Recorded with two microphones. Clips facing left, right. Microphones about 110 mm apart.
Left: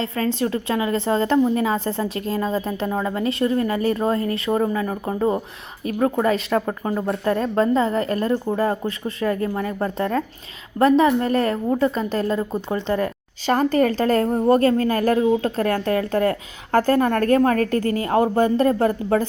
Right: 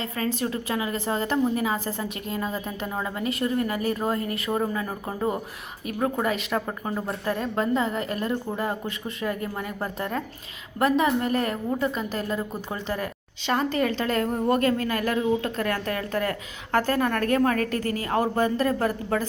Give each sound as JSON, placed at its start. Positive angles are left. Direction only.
{"t": 0.0, "sound": "a woman's voice", "side_deg": 30}